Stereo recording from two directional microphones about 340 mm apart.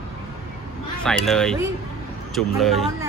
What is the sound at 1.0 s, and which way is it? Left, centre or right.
A man's voice, centre.